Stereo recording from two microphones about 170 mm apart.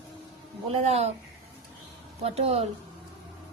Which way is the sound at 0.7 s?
40° right (ahead or behind).